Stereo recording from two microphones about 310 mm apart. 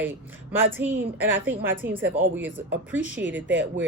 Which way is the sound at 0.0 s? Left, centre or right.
Centre.